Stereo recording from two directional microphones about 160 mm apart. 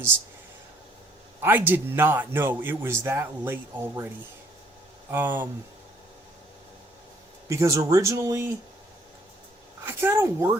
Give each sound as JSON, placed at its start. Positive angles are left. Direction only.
{"t": 1.4, "sound": "a man's voice", "side_deg": -10}
{"t": 5.1, "sound": "a man's voice", "side_deg": -15}
{"t": 7.4, "sound": "speech", "side_deg": -20}
{"t": 9.8, "sound": "a man's voice", "side_deg": -15}